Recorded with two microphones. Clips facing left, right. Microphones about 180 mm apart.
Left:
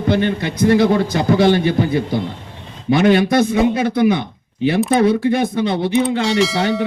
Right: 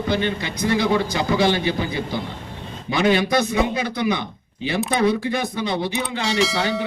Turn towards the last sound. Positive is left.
turn(degrees=0)  # may be behind; listen again after turning